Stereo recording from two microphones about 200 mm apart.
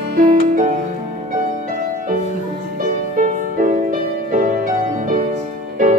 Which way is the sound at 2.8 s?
40° right (ahead or behind).